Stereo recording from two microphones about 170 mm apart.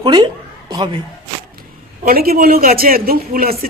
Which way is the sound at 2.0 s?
65° right (ahead or behind).